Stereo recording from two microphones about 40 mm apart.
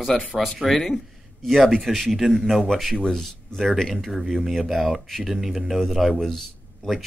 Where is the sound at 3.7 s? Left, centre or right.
Centre.